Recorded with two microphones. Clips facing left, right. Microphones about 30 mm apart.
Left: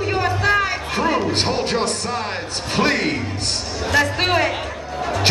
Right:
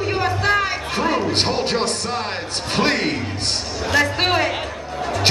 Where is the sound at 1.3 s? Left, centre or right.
Centre.